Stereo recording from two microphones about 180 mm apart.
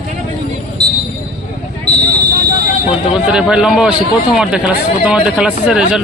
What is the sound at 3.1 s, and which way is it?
Speech, 5° right (ahead or behind).